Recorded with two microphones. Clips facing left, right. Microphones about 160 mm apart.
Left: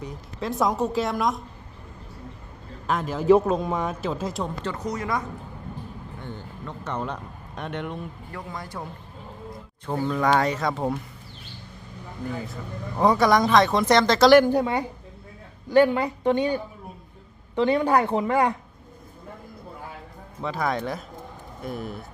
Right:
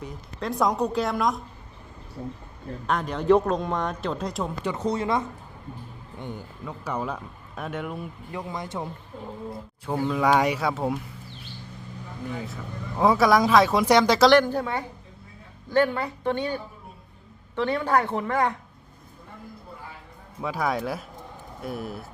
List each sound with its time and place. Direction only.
0.0 s speech: centre (ahead or behind)
2.8 s speech: centre (ahead or behind)
4.8 s speech: 30° right (ahead or behind)
6.1 s speech: 15° right (ahead or behind)
8.3 s speech: 20° right (ahead or behind)
9.8 s speech: 5° right (ahead or behind)
12.3 s speech: centre (ahead or behind)
14.3 s a woman's voice: 10° left (ahead or behind)
20.4 s speech: 10° right (ahead or behind)